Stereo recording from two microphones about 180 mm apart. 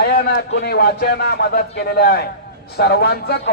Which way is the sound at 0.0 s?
60° left (ahead or behind).